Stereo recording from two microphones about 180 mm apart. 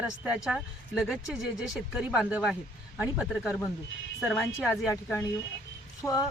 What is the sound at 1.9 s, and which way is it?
Speech, 5° right (ahead or behind).